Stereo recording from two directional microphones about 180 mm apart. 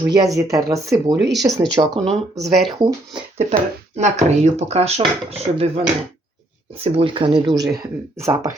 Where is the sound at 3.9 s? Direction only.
40° right (ahead or behind).